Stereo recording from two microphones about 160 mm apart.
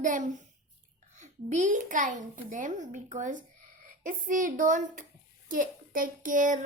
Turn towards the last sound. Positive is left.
turn(degrees=-55)  # may be behind; listen again after turning